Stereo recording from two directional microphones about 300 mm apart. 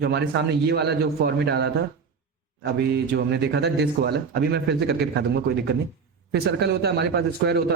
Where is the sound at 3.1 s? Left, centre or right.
Right.